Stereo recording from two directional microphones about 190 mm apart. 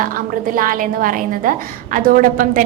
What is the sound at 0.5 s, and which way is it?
A woman's voice, 45° right (ahead or behind).